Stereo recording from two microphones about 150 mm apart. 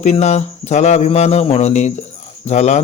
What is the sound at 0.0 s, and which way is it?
Speech, 50° left (ahead or behind).